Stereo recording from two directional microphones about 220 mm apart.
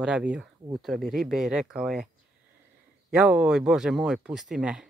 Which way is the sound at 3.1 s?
5° right (ahead or behind).